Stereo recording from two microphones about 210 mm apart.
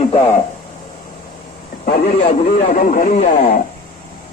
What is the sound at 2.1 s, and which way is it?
Speech, 30° left (ahead or behind).